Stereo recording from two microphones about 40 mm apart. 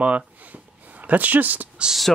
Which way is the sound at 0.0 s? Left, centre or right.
Right.